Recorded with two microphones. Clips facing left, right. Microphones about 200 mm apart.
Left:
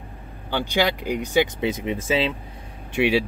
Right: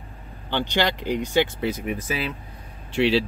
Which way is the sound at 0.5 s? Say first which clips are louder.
Left 1 dB; 10° left (ahead or behind).